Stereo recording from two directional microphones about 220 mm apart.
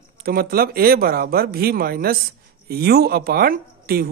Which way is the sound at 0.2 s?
40° right (ahead or behind).